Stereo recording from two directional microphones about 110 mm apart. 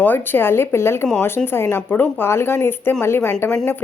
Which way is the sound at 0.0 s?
20° left (ahead or behind).